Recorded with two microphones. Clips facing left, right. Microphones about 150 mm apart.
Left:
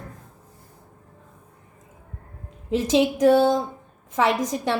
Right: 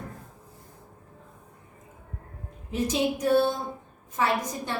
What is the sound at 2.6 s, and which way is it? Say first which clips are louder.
A woman's voice: left 6 dB; 90° left.